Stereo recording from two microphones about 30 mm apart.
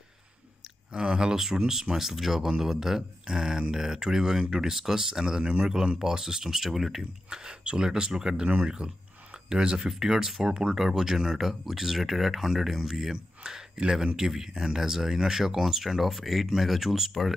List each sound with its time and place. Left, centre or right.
0.9 s speech: right
1.3 s speech: centre
5.4 s a man's voice: right
5.9 s speech: centre
7.2 s speech: right
9.8 s speech: centre
13.1 s speech: right; by 17.3 s centre